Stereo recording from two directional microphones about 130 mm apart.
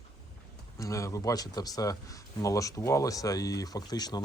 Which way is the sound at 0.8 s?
25° left (ahead or behind).